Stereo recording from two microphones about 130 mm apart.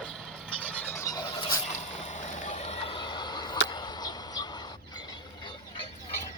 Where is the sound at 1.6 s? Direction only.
60° left (ahead or behind).